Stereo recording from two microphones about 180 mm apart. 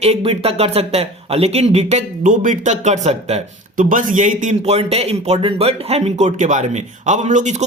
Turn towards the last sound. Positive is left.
turn(degrees=-45)  # may be behind; listen again after turning